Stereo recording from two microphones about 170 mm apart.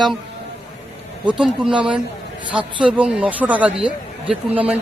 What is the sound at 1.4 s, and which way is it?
Speech, 5° right (ahead or behind).